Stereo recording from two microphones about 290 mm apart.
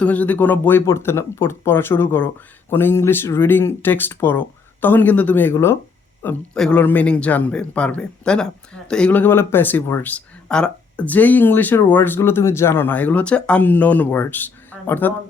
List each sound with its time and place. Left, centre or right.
0.0 s a man's voice: centre